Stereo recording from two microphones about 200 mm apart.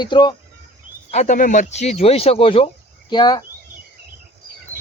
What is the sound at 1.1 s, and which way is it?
Speech, 35° left (ahead or behind).